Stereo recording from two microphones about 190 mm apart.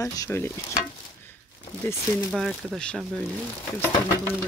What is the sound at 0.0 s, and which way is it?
Stir, 15° left (ahead or behind).